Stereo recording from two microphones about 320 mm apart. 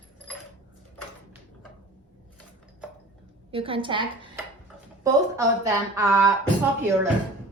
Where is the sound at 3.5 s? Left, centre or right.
Centre.